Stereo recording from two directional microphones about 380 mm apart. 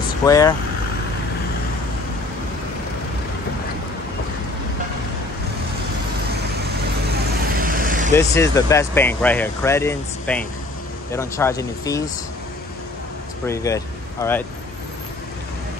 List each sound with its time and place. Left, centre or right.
0.3 s speech: centre
7.3 s vehicle: right
8.1 s speech: centre
13.5 s speech: centre